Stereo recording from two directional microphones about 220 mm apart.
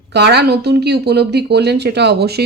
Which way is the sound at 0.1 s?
50° right (ahead or behind).